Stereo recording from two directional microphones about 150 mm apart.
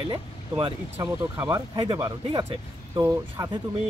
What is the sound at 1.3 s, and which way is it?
Speech, 20° right (ahead or behind).